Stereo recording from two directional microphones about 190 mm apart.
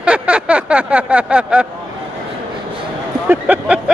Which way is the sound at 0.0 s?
5° right (ahead or behind).